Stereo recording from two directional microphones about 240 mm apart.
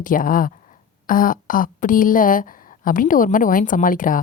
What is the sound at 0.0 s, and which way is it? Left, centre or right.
Speech, left.